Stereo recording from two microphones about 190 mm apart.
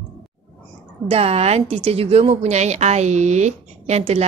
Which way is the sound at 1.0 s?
35° right (ahead or behind).